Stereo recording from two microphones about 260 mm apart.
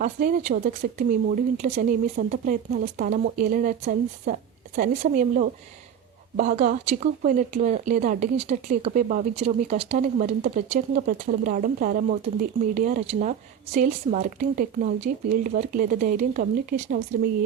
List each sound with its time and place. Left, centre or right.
0.0 s speech: right